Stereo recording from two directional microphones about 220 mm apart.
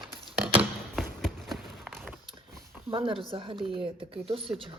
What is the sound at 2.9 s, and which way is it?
Speech, 25° right (ahead or behind).